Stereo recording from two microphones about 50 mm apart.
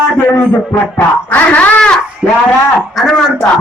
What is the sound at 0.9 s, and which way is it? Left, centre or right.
Speech, left.